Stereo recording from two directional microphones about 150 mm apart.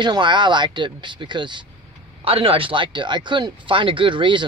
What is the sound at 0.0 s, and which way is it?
Speech, 30° right (ahead or behind).